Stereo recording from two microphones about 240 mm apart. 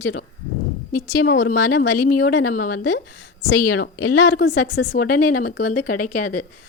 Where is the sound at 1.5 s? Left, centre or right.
Left.